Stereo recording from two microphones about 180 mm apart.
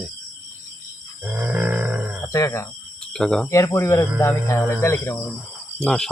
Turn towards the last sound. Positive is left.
turn(degrees=5)  # may be behind; listen again after turning